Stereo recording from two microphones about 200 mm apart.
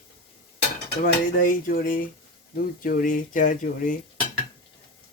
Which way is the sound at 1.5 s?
45° left (ahead or behind).